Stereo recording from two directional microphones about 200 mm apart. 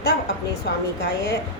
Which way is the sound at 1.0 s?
55° left (ahead or behind).